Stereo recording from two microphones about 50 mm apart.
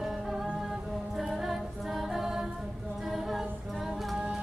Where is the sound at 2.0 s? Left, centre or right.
Centre.